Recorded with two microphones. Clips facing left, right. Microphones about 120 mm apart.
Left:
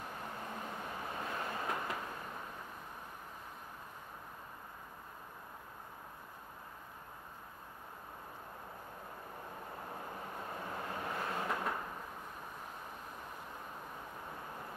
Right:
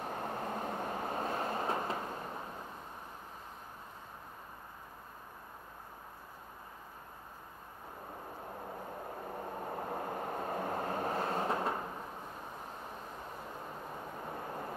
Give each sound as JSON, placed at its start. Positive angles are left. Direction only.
{"t": 0.0, "sound": "train", "side_deg": -45}
{"t": 9.4, "sound": "vehicle", "side_deg": -40}